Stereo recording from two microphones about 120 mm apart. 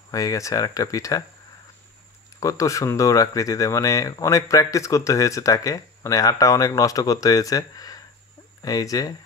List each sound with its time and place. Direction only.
0.1 s speech: 30° left (ahead or behind)
2.4 s speech: 25° left (ahead or behind)